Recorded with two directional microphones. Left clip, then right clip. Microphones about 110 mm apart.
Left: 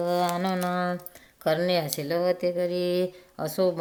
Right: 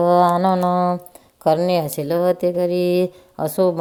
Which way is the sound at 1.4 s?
45° right (ahead or behind).